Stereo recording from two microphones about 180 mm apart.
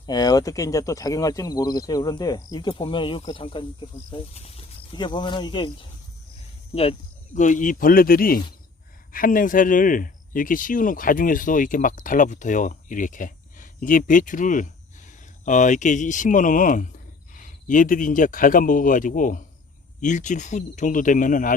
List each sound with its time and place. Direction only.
0.0 s speech: 20° left (ahead or behind)
7.3 s speech: 45° left (ahead or behind)